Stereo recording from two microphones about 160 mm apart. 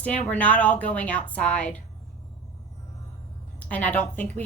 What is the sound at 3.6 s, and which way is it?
Speech, 10° left (ahead or behind).